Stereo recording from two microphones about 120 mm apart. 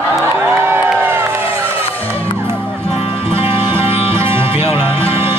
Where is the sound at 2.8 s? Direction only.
50° left (ahead or behind).